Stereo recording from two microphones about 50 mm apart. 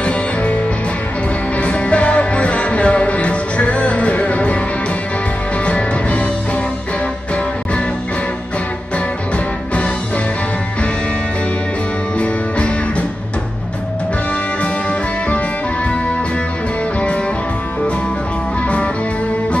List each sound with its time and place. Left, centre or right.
0.0 s music: left
1.6 s music: left
5.7 s music: left
12.2 s music: left